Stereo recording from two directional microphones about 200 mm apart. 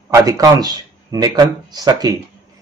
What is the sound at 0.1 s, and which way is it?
Speech, 15° right (ahead or behind).